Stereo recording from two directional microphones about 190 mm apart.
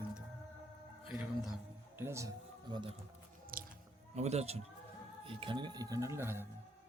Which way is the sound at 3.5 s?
50° right (ahead or behind).